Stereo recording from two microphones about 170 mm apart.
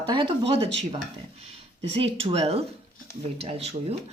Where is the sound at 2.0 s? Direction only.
35° right (ahead or behind).